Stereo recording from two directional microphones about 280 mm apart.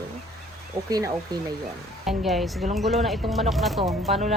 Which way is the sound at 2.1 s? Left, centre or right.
Centre.